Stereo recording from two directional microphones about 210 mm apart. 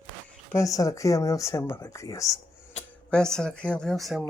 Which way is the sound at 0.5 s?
15° left (ahead or behind).